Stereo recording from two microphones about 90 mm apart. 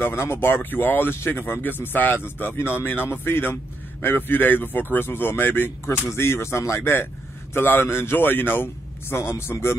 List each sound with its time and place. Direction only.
0.0 s speech: 25° left (ahead or behind)